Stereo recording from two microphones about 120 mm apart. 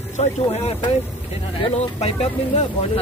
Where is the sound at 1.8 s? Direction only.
55° left (ahead or behind).